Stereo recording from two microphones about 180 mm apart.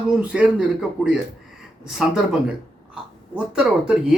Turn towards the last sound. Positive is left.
turn(degrees=-5)  # may be behind; listen again after turning